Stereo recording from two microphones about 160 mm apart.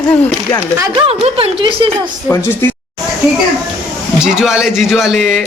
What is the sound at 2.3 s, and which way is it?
Speech, 15° left (ahead or behind).